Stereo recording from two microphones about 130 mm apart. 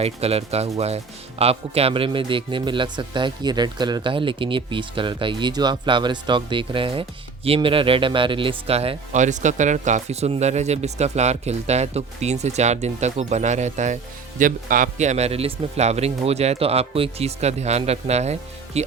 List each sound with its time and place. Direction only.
0.0 s a man's voice: 50° right (ahead or behind)
9.1 s speech: 70° right (ahead or behind)